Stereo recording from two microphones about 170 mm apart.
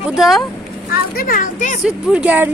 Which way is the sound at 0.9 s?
60° left (ahead or behind).